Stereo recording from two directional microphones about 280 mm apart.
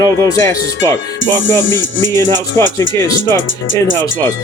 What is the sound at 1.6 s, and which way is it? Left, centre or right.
Speech, left.